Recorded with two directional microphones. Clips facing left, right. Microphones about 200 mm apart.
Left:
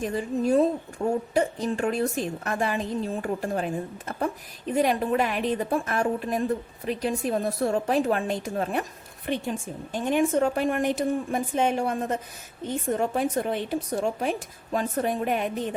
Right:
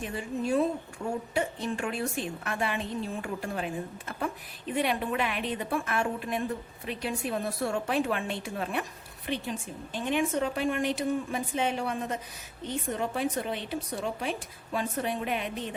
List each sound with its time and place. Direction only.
0.0 s a woman's voice: 40° left (ahead or behind)
4.7 s a woman's voice: 40° left (ahead or behind)